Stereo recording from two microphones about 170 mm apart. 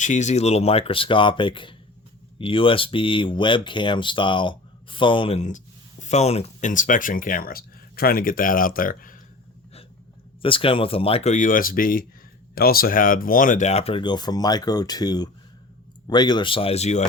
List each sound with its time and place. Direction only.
0.0 s speech: 45° left (ahead or behind)
10.4 s speech: 30° left (ahead or behind)